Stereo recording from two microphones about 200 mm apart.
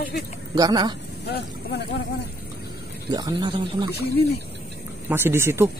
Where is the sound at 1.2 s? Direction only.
55° left (ahead or behind).